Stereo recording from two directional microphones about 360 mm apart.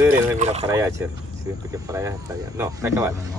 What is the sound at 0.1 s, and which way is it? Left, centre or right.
Speech, centre.